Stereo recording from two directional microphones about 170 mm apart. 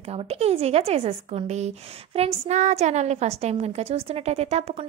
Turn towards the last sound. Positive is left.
turn(degrees=-35)  # may be behind; listen again after turning